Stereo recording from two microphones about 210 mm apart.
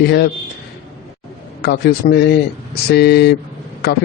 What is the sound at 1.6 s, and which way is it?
Speech, 50° left (ahead or behind).